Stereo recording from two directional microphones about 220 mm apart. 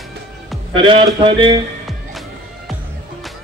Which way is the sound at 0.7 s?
25° right (ahead or behind).